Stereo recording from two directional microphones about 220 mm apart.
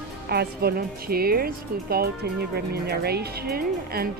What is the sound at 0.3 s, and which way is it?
Speech, 45° right (ahead or behind).